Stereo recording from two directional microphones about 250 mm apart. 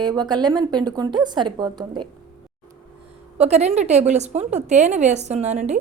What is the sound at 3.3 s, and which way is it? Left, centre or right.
A woman's voice, right.